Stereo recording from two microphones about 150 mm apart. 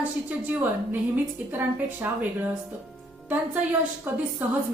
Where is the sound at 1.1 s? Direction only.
15° right (ahead or behind).